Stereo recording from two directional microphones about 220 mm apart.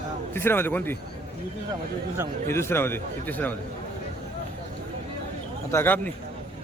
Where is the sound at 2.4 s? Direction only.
10° left (ahead or behind).